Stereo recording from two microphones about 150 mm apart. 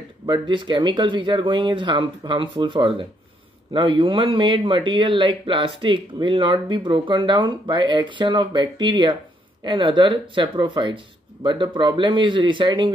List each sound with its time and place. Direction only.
0.3 s speech: 35° right (ahead or behind)